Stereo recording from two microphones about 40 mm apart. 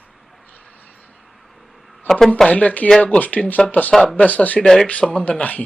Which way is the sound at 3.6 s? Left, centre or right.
Centre.